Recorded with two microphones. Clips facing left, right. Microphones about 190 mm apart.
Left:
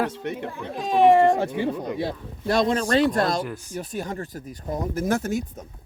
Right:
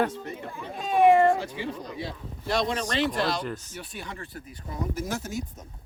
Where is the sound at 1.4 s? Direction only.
55° left (ahead or behind).